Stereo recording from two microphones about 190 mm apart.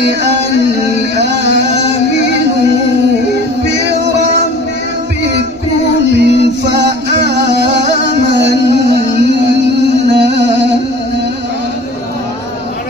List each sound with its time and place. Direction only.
1.1 s music: 65° right (ahead or behind)
6.1 s music: 65° right (ahead or behind)